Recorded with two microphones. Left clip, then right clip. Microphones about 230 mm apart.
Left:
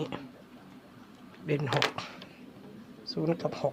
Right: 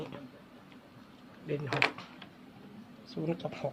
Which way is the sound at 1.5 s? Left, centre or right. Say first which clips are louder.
Left 5 dB; left.